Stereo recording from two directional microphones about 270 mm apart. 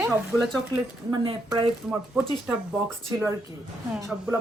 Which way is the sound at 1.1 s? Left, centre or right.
Centre.